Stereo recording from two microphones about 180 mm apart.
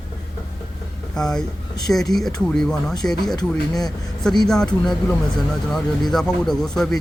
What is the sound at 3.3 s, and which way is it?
Speech, 20° left (ahead or behind).